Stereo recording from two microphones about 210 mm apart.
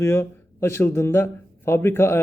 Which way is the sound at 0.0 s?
10° left (ahead or behind).